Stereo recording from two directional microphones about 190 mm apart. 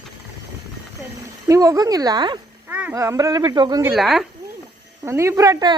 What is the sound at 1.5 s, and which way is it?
Speech, 15° right (ahead or behind).